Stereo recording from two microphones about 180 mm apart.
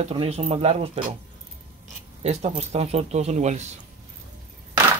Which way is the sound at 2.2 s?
35° right (ahead or behind).